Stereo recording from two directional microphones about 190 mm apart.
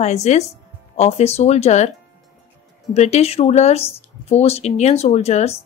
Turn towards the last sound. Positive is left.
turn(degrees=35)  # may be behind; listen again after turning